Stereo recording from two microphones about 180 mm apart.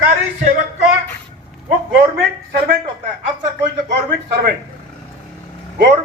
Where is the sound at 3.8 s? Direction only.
70° right (ahead or behind).